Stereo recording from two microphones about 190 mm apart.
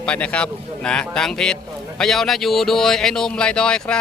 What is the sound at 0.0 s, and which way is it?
Speech, 5° left (ahead or behind).